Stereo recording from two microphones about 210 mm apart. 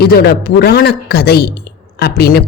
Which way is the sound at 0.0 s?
50° left (ahead or behind).